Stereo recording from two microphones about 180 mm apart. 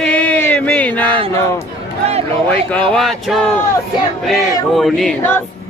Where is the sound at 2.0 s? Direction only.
35° right (ahead or behind).